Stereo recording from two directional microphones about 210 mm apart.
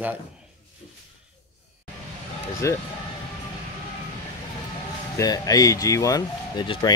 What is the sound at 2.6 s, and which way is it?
Speech, 15° left (ahead or behind).